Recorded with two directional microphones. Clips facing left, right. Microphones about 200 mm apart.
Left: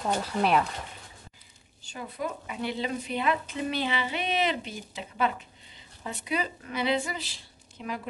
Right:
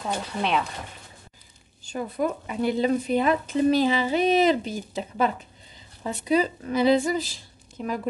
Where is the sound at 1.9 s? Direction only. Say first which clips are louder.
Right 8 dB; 45° right (ahead or behind).